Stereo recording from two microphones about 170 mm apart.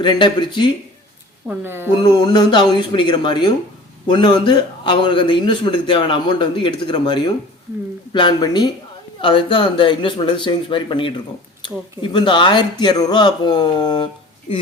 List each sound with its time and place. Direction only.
0.0 s a man's voice: 30° left (ahead or behind)
1.5 s speech: 15° right (ahead or behind)
2.0 s a man's voice: 25° left (ahead or behind)